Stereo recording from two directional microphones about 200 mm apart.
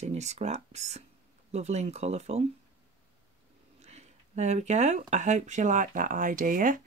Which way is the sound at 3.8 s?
35° right (ahead or behind).